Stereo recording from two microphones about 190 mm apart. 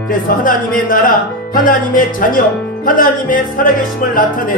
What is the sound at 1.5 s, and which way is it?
Speech, 45° left (ahead or behind).